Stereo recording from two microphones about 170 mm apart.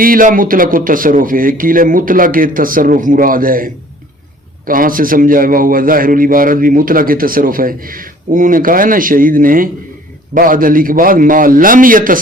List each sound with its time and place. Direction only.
0.0 s a man's voice: 55° right (ahead or behind)